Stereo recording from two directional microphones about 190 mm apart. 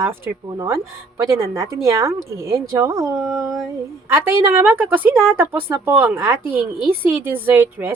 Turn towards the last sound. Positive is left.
turn(degrees=-10)  # may be behind; listen again after turning